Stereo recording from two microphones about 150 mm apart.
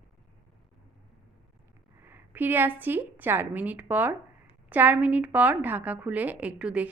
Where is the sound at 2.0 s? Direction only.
15° right (ahead or behind).